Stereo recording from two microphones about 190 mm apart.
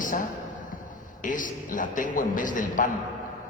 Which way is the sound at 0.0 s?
45° left (ahead or behind).